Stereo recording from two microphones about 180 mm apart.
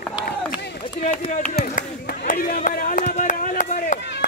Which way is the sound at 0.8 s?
35° left (ahead or behind).